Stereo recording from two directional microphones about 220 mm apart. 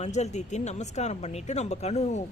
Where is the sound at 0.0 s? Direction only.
30° left (ahead or behind).